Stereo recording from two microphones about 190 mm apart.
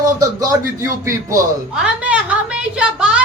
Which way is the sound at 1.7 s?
5° right (ahead or behind).